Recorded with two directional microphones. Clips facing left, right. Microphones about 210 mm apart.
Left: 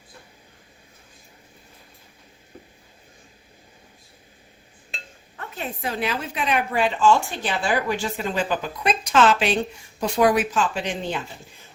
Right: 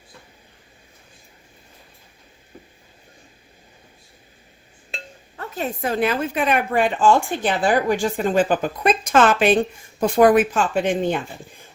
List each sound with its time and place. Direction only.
5.4 s a woman's voice: 40° right (ahead or behind)